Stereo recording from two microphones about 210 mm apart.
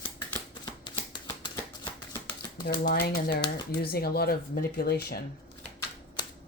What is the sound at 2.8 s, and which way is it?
Speech, 45° left (ahead or behind).